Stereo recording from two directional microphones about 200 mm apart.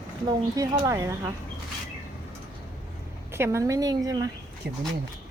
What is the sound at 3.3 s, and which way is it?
Speech, 15° right (ahead or behind).